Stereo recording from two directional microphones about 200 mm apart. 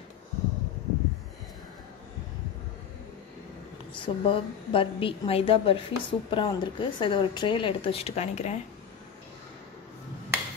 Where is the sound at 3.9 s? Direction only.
25° left (ahead or behind).